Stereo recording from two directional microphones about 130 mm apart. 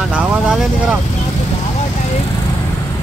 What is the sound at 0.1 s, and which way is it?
Speech, 5° right (ahead or behind).